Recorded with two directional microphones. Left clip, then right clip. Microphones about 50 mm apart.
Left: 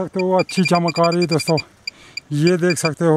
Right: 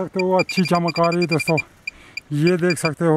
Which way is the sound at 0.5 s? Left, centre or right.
Left.